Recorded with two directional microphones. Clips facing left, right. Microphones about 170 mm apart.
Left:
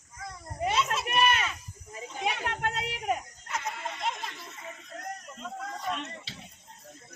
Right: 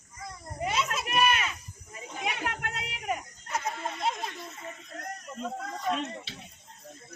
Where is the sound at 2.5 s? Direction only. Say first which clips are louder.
Left 4 dB; 35° left (ahead or behind).